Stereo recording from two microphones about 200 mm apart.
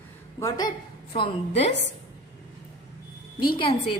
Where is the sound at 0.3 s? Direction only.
20° left (ahead or behind).